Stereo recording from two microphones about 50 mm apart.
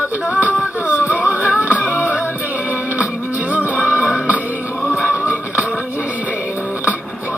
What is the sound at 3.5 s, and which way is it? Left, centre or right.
Music, right.